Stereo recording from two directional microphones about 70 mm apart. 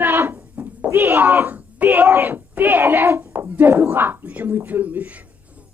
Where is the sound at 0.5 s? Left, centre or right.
Right.